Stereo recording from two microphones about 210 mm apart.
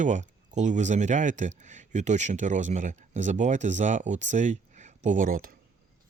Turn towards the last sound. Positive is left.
turn(degrees=-40)  # may be behind; listen again after turning